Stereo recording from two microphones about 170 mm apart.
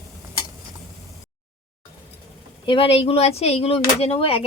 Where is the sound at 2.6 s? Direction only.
30° left (ahead or behind).